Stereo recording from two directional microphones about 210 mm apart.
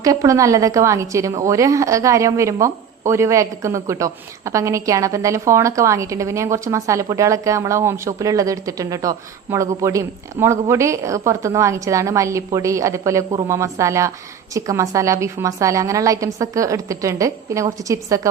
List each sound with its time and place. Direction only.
0.0 s a woman's voice: 15° right (ahead or behind)